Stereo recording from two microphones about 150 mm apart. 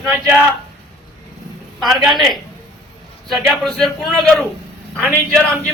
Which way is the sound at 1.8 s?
Centre (ahead or behind).